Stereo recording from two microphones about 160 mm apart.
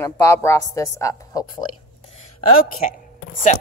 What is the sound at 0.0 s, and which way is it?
A woman's voice, 15° left (ahead or behind).